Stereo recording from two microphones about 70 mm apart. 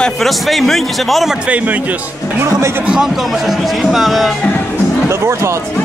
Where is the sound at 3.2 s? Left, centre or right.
Centre.